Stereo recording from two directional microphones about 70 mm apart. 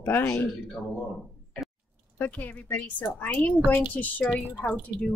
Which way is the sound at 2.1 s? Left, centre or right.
Left.